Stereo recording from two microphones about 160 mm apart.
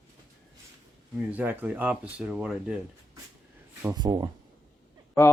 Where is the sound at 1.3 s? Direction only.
10° right (ahead or behind).